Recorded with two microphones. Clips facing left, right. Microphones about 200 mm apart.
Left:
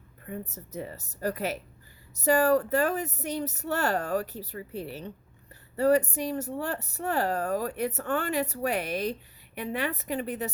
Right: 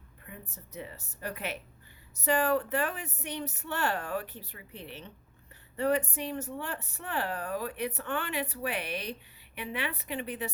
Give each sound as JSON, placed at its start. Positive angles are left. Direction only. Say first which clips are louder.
{"t": 0.3, "sound": "a woman's voice", "louder": "left 10 dB", "side_deg": 40}